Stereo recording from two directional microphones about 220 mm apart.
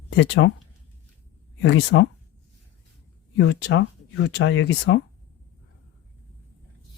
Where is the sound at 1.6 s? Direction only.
50° left (ahead or behind).